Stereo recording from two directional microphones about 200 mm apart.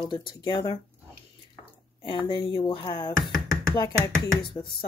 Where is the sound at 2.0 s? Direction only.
25° left (ahead or behind).